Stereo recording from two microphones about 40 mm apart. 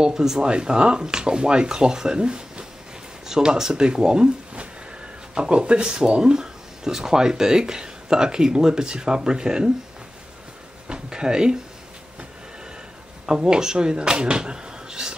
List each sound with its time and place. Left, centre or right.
0.0 s speech: centre
5.3 s speech: right
10.9 s speech: centre
13.3 s speech: centre